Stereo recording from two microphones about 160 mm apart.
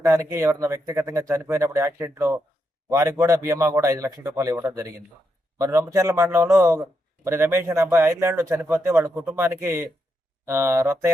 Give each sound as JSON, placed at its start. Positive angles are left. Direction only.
{"t": 0.0, "sound": "a man's voice", "side_deg": -15}